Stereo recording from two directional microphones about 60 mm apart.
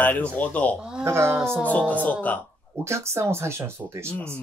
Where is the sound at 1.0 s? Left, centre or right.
Right.